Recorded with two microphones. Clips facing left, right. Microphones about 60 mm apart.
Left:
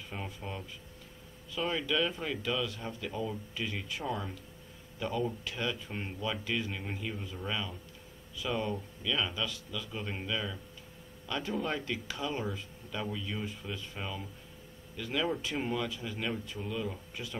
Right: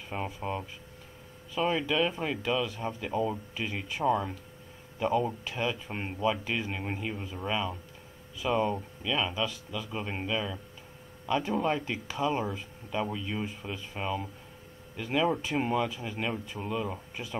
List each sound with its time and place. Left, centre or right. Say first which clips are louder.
0.1 s speech: right 8 dB; right
5.9 s speech: right 7 dB; right